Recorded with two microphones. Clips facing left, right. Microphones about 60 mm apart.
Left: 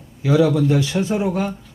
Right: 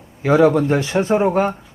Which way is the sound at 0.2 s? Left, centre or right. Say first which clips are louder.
Right 3 dB; right.